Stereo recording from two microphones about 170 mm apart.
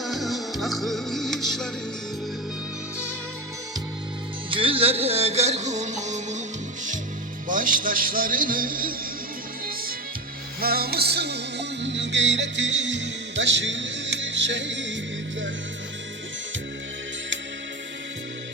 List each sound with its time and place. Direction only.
0.0 s music: centre (ahead or behind)
4.5 s music: 30° right (ahead or behind)
7.4 s speech: 55° right (ahead or behind)
10.6 s music: 65° right (ahead or behind); by 14.9 s 90° right